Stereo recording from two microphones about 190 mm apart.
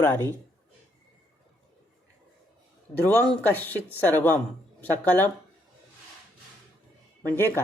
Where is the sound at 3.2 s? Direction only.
10° left (ahead or behind).